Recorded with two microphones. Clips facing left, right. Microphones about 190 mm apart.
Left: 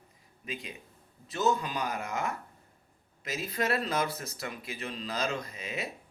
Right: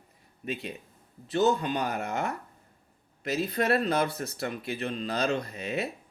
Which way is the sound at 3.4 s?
60° right (ahead or behind).